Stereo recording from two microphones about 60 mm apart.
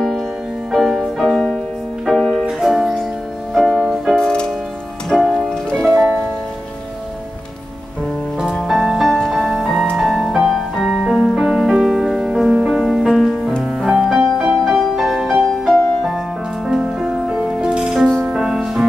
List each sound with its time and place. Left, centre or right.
0.7 s music: centre
4.1 s music: centre
5.9 s music: right
8.5 s music: centre
16.8 s music: centre